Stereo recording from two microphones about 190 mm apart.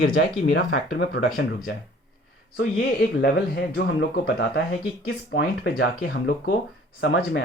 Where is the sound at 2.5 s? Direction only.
60° left (ahead or behind).